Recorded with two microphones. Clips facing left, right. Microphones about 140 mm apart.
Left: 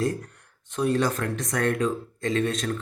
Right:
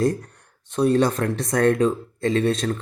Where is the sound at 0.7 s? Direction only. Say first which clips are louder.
Right 5 dB; 35° right (ahead or behind).